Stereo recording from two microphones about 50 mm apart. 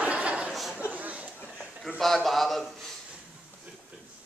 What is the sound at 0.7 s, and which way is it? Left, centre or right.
Speech, right.